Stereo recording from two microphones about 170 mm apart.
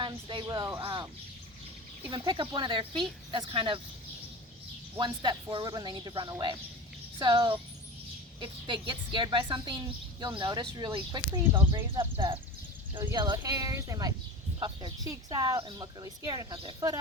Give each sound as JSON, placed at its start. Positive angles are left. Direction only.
{"t": 0.0, "sound": "speech", "side_deg": -25}
{"t": 0.9, "sound": "bird", "side_deg": -25}
{"t": 2.0, "sound": "speech", "side_deg": -30}
{"t": 4.9, "sound": "speech", "side_deg": -25}